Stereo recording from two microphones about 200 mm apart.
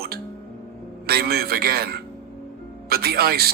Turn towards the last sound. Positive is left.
turn(degrees=-50)  # may be behind; listen again after turning